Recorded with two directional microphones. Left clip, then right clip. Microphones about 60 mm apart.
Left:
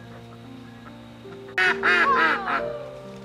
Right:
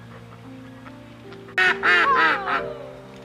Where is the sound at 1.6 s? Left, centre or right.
Centre.